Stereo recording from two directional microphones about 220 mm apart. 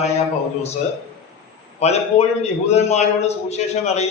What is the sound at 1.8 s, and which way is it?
A man's voice, 30° left (ahead or behind).